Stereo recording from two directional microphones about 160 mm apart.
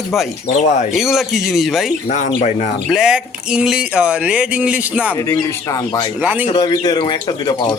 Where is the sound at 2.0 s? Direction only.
50° left (ahead or behind).